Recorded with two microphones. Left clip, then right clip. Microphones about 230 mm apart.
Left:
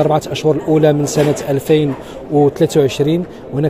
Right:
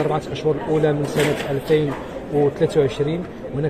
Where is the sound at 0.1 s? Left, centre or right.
Left.